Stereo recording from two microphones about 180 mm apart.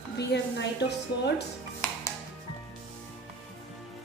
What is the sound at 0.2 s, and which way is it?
A woman's voice, 70° left (ahead or behind).